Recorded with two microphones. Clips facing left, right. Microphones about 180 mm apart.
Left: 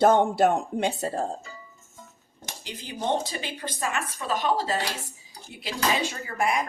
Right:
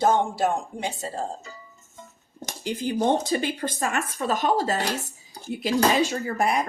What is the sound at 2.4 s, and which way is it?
Speech, 50° right (ahead or behind).